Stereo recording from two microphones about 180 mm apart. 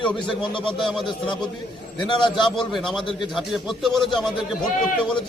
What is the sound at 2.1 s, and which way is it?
Speech, 25° left (ahead or behind).